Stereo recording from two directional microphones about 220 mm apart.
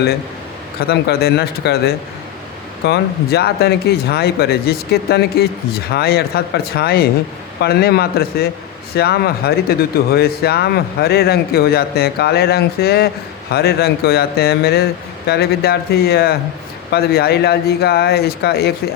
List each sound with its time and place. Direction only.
0.8 s speech: 45° left (ahead or behind)